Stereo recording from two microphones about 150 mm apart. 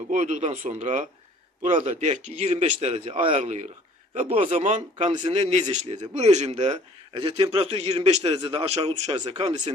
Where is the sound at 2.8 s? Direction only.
40° right (ahead or behind).